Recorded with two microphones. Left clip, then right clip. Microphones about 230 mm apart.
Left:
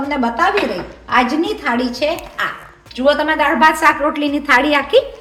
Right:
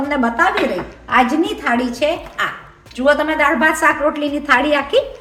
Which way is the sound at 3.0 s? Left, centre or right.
Centre.